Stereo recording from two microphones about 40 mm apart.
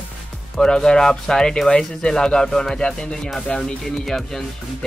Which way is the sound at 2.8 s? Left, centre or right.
Left.